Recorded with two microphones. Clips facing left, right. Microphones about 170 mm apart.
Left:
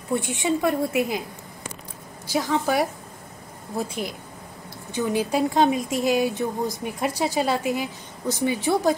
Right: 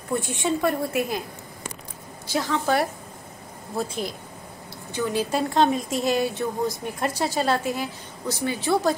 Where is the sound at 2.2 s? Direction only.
15° left (ahead or behind).